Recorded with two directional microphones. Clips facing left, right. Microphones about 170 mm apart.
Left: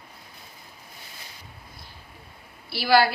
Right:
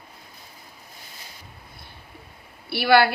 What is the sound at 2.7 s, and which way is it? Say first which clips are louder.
Speech: right 2 dB; 60° right (ahead or behind).